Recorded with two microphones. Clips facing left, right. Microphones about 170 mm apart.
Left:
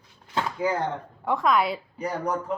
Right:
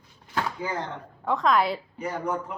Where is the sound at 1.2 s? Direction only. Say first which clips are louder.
Even; 10° left (ahead or behind).